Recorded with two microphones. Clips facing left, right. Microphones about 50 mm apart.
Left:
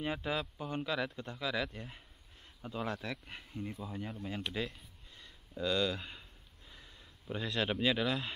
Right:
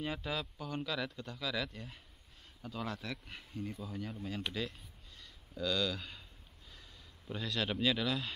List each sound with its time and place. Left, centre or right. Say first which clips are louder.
0.0 s speech: left 2 dB; left
5.5 s speech: left 2 dB; centre